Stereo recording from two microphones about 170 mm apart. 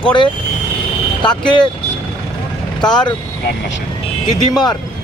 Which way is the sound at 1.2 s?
25° left (ahead or behind).